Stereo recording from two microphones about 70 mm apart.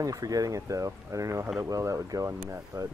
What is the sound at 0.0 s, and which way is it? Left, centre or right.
Speech, right.